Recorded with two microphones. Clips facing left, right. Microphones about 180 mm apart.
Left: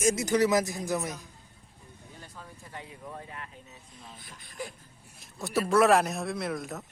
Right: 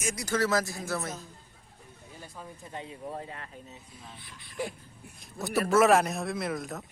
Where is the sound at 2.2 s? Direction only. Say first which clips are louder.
Right 4 dB; 10° right (ahead or behind).